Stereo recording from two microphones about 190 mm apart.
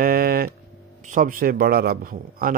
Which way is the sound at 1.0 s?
45° right (ahead or behind).